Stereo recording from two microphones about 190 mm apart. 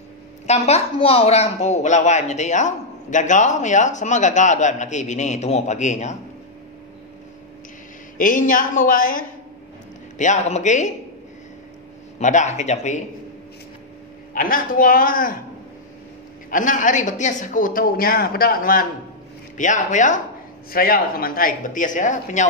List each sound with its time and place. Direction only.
0.5 s speech: 35° left (ahead or behind)
8.2 s a man's voice: 45° left (ahead or behind)
12.2 s speech: 40° left (ahead or behind)
14.3 s a man's voice: 45° left (ahead or behind)
16.4 s a man's voice: 45° left (ahead or behind)